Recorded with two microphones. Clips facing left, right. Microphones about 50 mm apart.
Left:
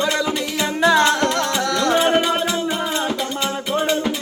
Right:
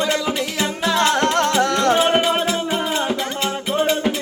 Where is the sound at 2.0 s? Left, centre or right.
Centre.